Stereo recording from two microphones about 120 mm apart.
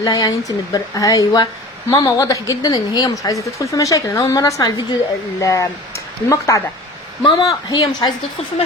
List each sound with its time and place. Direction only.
0.0 s a woman's voice: 30° left (ahead or behind)
7.2 s speech: 40° left (ahead or behind)